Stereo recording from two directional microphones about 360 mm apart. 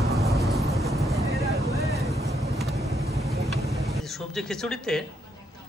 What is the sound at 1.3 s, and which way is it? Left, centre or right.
Vehicle, right.